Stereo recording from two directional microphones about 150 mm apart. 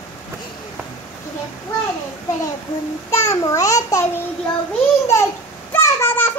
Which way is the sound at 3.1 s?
20° left (ahead or behind).